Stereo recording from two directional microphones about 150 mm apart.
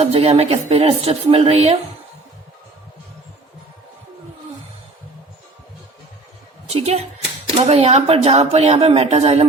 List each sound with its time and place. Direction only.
0.0 s a woman's voice: 45° right (ahead or behind)
6.7 s a woman's voice: 45° right (ahead or behind)